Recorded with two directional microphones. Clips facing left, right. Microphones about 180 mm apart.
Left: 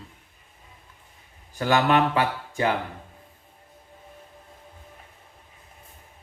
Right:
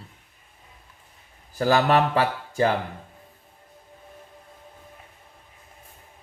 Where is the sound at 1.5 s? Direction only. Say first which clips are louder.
Right 1 dB; 35° right (ahead or behind).